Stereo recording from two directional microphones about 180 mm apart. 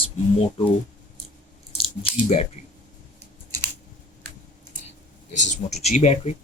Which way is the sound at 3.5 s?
15° left (ahead or behind).